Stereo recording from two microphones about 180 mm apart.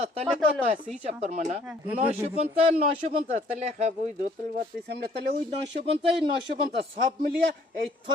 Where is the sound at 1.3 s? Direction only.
40° right (ahead or behind).